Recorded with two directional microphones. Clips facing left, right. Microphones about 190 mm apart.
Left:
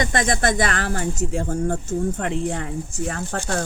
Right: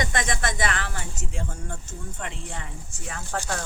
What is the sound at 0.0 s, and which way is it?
Speech, 35° left (ahead or behind).